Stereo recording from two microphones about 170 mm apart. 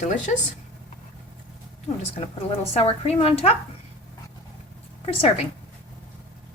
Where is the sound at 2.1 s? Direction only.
35° left (ahead or behind).